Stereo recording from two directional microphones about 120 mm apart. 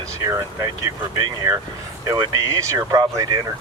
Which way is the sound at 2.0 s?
30° right (ahead or behind).